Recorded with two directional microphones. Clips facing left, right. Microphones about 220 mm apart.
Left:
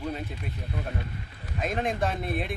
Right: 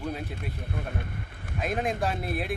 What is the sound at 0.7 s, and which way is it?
Speech, 50° right (ahead or behind).